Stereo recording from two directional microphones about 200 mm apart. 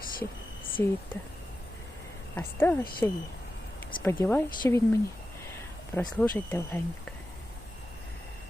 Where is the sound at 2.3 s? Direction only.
10° left (ahead or behind).